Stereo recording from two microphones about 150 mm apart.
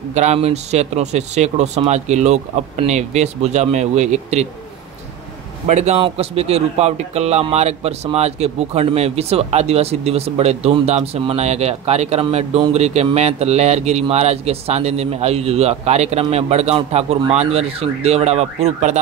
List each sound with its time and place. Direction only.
0.1 s a man's voice: 50° right (ahead or behind)
5.7 s a man's voice: 50° right (ahead or behind)